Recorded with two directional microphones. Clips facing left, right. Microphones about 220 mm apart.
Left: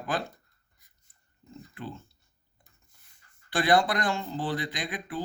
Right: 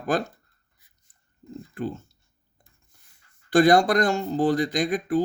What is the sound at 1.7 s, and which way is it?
Speech, 45° right (ahead or behind).